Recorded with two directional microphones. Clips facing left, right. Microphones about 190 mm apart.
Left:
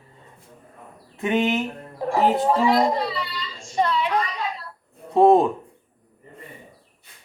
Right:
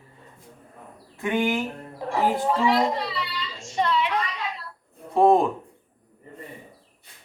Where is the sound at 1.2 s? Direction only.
20° left (ahead or behind).